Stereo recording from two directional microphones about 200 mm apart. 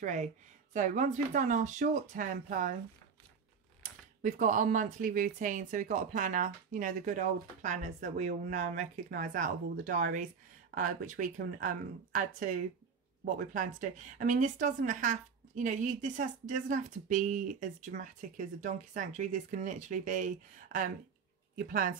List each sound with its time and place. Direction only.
0.0 s speech: 40° right (ahead or behind)
4.2 s speech: 40° right (ahead or behind)